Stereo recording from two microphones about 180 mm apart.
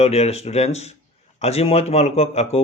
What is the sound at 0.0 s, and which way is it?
Speech, 35° left (ahead or behind).